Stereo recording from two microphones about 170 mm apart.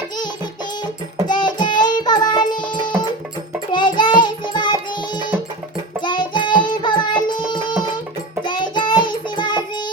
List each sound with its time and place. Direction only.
1.3 s music: 25° left (ahead or behind)
6.0 s child singing: 25° left (ahead or behind)